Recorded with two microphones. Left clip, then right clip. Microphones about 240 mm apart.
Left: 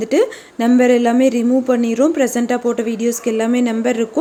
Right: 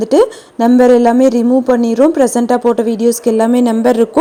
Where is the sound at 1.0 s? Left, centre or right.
Centre.